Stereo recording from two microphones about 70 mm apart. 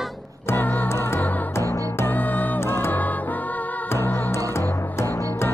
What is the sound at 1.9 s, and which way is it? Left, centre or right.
Music, left.